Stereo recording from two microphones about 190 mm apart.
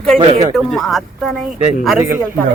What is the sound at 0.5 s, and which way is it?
Speech, centre (ahead or behind).